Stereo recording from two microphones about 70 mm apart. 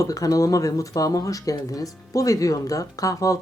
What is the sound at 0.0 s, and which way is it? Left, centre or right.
Speech, left.